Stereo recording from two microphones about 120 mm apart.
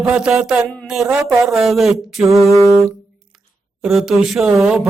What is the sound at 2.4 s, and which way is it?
Music, 25° right (ahead or behind).